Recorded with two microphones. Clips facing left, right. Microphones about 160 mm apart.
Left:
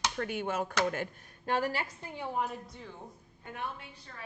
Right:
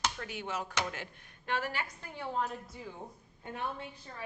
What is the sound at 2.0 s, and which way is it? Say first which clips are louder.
Speech: right 2 dB; 15° left (ahead or behind).